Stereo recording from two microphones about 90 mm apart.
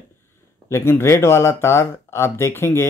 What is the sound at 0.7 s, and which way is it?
Speech, 30° left (ahead or behind).